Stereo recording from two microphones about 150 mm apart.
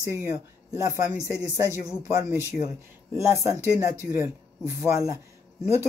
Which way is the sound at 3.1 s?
15° right (ahead or behind).